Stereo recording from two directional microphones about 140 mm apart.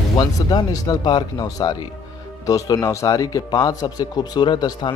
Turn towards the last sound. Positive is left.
turn(degrees=30)  # may be behind; listen again after turning